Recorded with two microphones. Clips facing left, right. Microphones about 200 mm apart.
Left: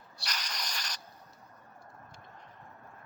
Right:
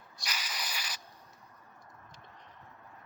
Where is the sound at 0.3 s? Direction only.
5° right (ahead or behind).